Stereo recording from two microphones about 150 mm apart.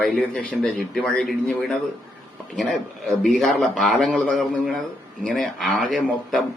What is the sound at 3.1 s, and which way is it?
A man's voice, centre (ahead or behind).